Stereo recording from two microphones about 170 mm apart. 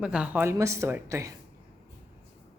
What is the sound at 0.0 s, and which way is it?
Speech, 5° right (ahead or behind).